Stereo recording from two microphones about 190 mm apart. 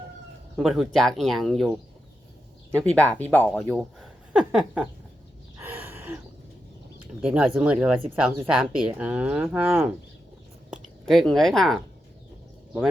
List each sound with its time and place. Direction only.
0.5 s speech: centre (ahead or behind)
4.3 s speech: 5° right (ahead or behind)
5.5 s gasp: 10° right (ahead or behind)
7.3 s speech: 5° right (ahead or behind)